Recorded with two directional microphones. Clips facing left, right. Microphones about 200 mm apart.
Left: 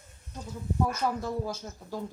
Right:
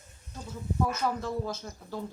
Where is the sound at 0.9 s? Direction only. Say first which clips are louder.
Even; 10° left (ahead or behind).